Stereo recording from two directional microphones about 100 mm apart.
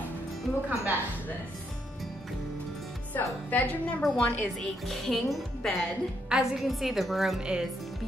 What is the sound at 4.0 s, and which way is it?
A woman's voice, centre (ahead or behind).